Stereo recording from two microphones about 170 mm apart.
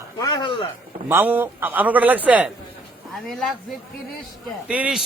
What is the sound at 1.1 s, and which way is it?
A man's voice, 10° right (ahead or behind).